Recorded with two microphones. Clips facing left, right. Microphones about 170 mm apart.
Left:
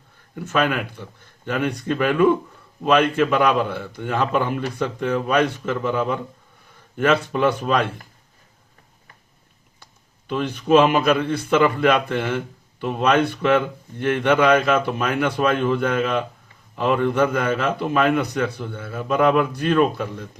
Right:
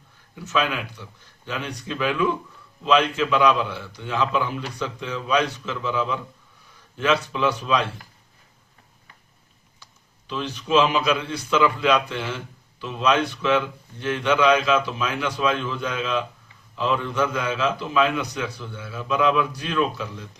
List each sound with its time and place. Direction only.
0.3 s a man's voice: 55° left (ahead or behind)
9.8 s a man's voice: 55° left (ahead or behind)